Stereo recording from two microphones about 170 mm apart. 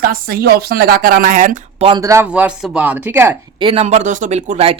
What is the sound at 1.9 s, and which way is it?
Speech, 20° right (ahead or behind).